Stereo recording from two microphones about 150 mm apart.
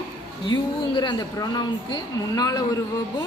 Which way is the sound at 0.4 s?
30° left (ahead or behind).